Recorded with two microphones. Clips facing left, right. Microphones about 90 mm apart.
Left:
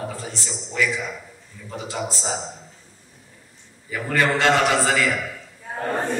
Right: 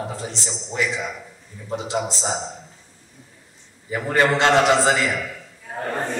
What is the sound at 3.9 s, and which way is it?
A man's voice, 25° right (ahead or behind).